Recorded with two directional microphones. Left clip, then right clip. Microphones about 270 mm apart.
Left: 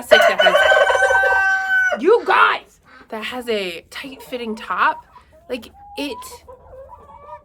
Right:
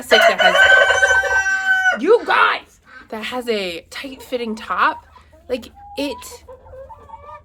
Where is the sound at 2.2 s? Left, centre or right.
Centre.